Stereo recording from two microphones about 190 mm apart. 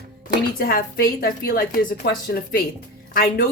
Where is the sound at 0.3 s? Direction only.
50° left (ahead or behind).